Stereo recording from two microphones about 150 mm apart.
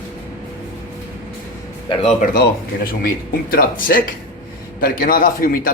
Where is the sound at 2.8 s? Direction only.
75° left (ahead or behind).